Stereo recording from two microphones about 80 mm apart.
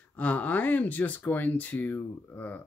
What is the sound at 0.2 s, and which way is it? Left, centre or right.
Speech, centre.